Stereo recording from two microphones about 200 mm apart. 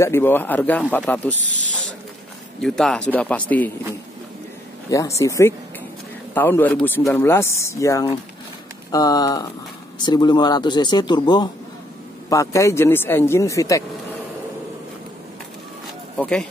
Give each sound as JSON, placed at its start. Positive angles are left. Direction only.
{"t": 0.0, "sound": "speech", "side_deg": 10}
{"t": 2.6, "sound": "speech", "side_deg": 5}
{"t": 4.9, "sound": "speech", "side_deg": 15}
{"t": 16.2, "sound": "speech", "side_deg": 5}